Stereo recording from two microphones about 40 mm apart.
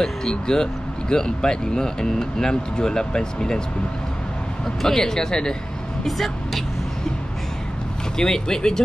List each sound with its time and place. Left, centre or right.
0.0 s speech: centre
4.8 s speech: centre
6.0 s speech: centre
8.2 s speech: centre